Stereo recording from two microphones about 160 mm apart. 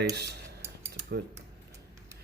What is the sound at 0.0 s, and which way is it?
Speech, 90° right.